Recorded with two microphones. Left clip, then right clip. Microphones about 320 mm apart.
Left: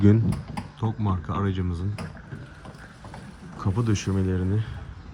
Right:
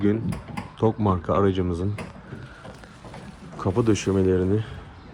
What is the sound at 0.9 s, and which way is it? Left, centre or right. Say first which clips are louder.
Speech: right 9 dB; right.